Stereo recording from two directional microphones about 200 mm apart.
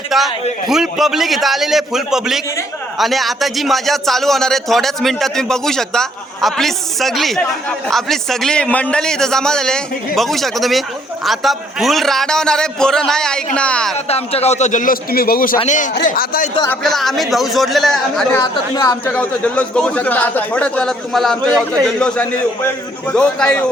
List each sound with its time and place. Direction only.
0.1 s a man's voice: centre (ahead or behind)
13.9 s a man's voice: 30° left (ahead or behind)
16.8 s a man's voice: centre (ahead or behind)
18.5 s speech: 20° left (ahead or behind)
19.0 s a man's voice: 10° left (ahead or behind)